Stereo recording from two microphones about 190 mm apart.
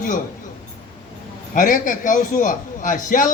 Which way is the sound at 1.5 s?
45° left (ahead or behind).